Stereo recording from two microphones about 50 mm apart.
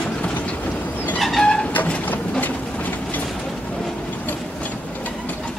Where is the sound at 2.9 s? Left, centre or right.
Left.